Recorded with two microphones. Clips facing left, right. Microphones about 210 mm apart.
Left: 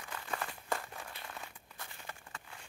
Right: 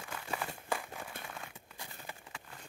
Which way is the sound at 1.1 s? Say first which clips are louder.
Right 3 dB; 50° right (ahead or behind).